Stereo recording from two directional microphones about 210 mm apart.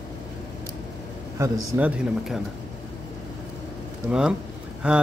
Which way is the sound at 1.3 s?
15° right (ahead or behind).